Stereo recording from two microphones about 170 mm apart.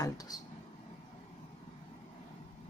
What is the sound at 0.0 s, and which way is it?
Speech, 20° left (ahead or behind).